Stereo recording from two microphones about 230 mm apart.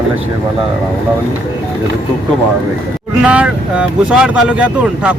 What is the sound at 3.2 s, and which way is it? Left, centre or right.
A man's voice, centre.